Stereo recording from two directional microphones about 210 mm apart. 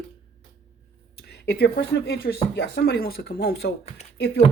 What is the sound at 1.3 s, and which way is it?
A woman's voice, 50° left (ahead or behind).